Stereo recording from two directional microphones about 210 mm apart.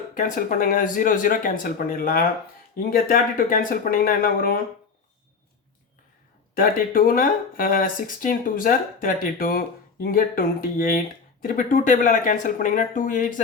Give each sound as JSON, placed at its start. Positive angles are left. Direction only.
{"t": 0.1, "sound": "speech", "side_deg": 40}
{"t": 6.5, "sound": "speech", "side_deg": 40}